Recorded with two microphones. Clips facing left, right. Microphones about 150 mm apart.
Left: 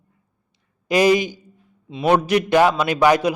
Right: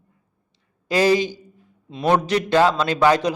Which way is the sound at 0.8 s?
15° left (ahead or behind).